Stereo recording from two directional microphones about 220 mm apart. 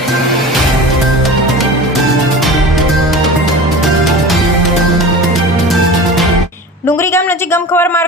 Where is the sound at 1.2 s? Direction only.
Centre (ahead or behind).